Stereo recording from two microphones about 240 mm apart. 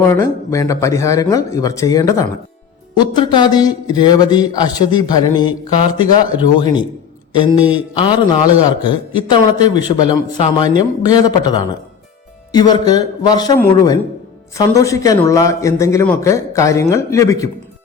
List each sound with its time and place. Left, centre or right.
0.0 s speech: centre